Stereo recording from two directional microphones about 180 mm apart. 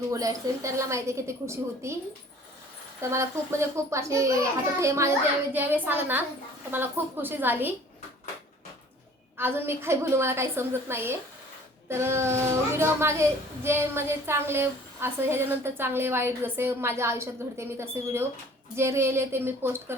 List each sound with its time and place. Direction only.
0.1 s a woman's voice: 20° right (ahead or behind)
3.0 s a woman's voice: 15° right (ahead or behind)
9.4 s a woman's voice: 15° right (ahead or behind)